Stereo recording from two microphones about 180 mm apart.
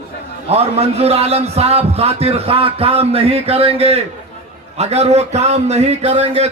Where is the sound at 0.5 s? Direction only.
35° right (ahead or behind).